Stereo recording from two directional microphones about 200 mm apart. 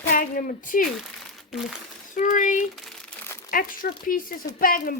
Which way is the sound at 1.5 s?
Centre (ahead or behind).